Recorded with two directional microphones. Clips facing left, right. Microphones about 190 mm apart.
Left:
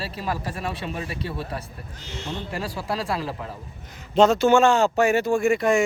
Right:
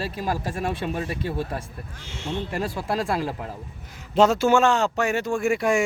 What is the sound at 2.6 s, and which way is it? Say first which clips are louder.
Speech: right 1 dB; 50° right (ahead or behind).